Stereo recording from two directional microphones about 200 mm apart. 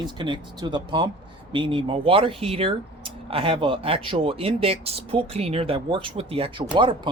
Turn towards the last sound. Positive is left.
turn(degrees=-25)  # may be behind; listen again after turning